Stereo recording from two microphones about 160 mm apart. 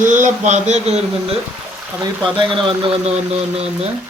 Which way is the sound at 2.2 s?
30° right (ahead or behind).